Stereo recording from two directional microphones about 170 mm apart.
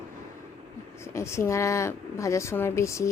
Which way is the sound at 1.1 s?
15° left (ahead or behind).